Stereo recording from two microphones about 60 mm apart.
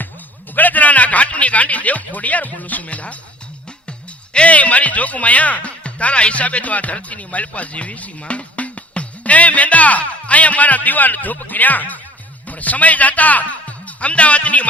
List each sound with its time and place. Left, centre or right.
0.5 s a man's voice: left
4.4 s speech: left